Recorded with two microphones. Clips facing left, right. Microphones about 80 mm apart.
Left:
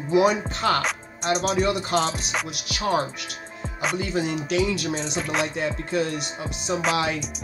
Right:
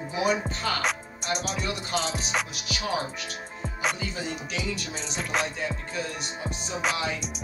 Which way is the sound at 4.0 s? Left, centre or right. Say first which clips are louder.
Left 7 dB; left.